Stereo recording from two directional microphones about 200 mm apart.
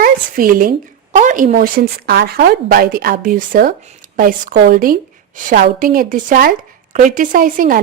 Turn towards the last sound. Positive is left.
turn(degrees=-45)  # may be behind; listen again after turning